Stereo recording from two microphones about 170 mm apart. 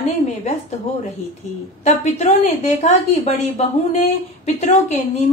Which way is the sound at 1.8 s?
45° left (ahead or behind).